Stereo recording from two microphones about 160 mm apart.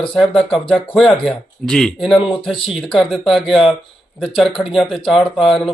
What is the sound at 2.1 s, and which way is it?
Speech, 35° left (ahead or behind).